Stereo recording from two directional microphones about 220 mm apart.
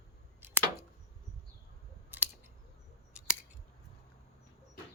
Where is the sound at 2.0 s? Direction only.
10° right (ahead or behind).